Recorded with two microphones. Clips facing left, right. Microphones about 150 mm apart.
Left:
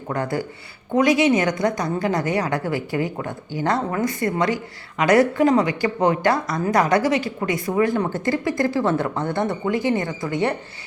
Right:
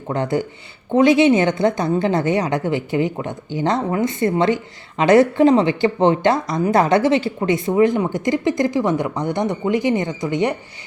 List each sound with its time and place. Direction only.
0.1 s a woman's voice: 20° right (ahead or behind)